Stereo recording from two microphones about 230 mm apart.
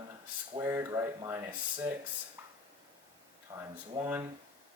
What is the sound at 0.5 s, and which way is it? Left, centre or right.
Speech, centre.